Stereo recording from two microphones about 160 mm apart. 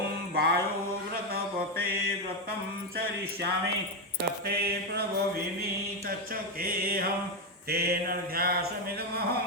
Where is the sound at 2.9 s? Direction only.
80° right.